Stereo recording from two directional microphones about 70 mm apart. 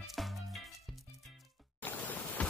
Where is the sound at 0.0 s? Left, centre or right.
Centre.